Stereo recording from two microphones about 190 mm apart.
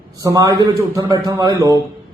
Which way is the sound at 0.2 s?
20° right (ahead or behind).